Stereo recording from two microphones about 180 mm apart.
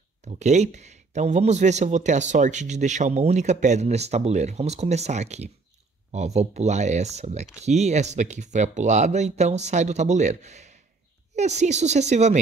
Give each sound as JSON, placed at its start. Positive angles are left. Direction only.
{"t": 0.2, "sound": "speech", "side_deg": -40}